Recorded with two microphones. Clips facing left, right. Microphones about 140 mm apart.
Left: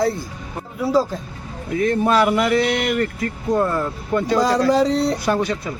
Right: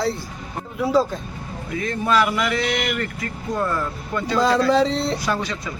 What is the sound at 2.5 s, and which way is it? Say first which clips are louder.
Speech: left 5 dB; 55° left (ahead or behind).